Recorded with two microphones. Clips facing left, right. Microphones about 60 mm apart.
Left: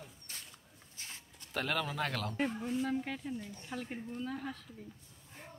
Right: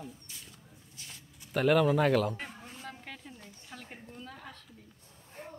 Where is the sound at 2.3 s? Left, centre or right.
Centre.